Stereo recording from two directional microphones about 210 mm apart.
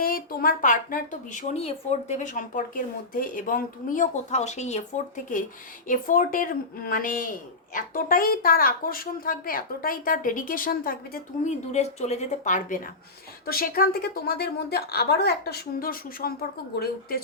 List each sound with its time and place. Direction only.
0.0 s a woman's voice: 45° left (ahead or behind)